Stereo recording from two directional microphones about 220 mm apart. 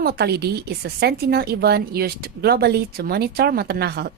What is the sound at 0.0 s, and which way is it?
Speech, 45° right (ahead or behind).